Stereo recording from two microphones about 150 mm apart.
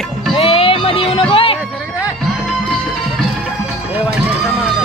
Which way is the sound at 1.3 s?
35° left (ahead or behind).